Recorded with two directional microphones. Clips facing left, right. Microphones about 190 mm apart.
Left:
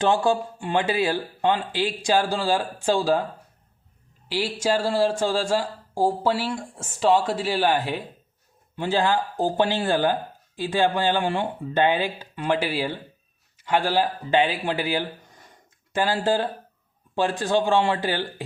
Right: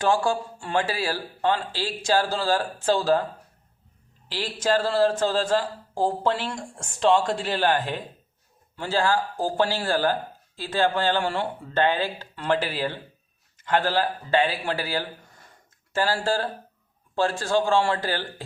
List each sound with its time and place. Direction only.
0.0 s speech: 20° left (ahead or behind)
4.3 s speech: 10° left (ahead or behind)